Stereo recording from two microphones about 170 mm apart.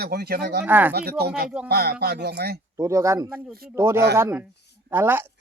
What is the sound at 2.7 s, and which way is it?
Speech, 15° right (ahead or behind).